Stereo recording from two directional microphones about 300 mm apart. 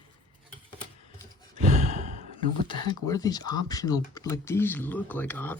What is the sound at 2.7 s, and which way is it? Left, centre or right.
Speech, centre.